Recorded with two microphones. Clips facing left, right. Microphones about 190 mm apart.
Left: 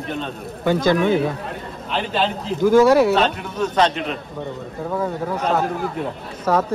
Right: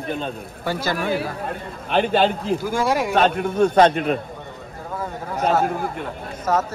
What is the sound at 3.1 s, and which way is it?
A man's voice, 50° right (ahead or behind).